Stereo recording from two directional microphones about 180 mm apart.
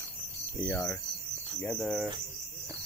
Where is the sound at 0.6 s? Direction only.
15° left (ahead or behind).